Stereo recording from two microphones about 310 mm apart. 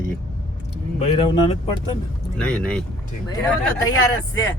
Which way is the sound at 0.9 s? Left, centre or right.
Centre.